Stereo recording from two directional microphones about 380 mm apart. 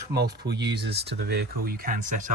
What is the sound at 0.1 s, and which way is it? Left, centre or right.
Speech, right.